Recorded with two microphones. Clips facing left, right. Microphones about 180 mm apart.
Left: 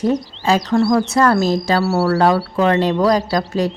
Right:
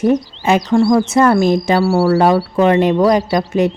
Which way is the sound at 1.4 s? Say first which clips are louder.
Right 4 dB; 55° right (ahead or behind).